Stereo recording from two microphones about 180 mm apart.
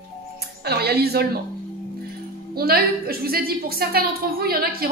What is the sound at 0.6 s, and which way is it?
Speech, 60° right (ahead or behind).